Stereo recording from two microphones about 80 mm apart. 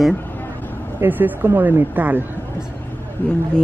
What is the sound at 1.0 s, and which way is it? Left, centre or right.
A woman's voice, right.